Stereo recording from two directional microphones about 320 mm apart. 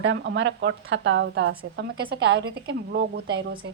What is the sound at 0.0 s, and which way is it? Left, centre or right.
A woman's voice, right.